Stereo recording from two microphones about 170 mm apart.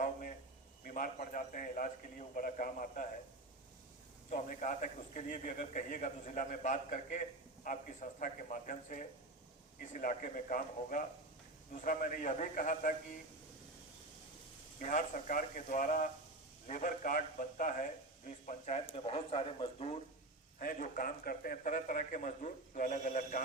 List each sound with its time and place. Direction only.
0.0 s a sound: 50° left (ahead or behind)
0.9 s a man's voice: 50° left (ahead or behind)
4.3 s a man's voice: 50° left (ahead or behind)
14.8 s a man's voice: 50° left (ahead or behind)
20.6 s a man's voice: 50° left (ahead or behind)